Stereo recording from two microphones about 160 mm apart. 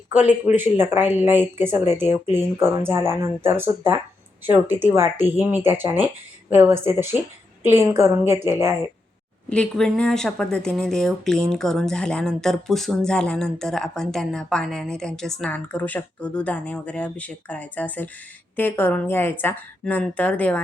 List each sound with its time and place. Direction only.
0.1 s speech: 10° right (ahead or behind)
9.5 s speech: 5° left (ahead or behind)